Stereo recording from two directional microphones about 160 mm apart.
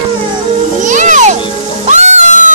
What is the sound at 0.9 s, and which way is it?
Children playing, 50° right (ahead or behind).